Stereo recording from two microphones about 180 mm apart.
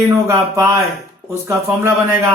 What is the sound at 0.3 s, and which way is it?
Speech, 15° right (ahead or behind).